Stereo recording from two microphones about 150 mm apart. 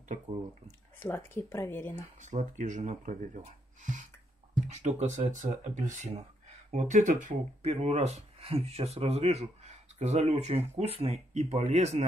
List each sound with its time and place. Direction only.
0.7 s speech: 15° left (ahead or behind)
2.2 s speech: 55° right (ahead or behind)
7.6 s speech: 45° right (ahead or behind)